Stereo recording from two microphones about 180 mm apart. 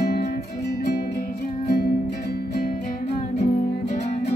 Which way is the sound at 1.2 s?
40° left (ahead or behind).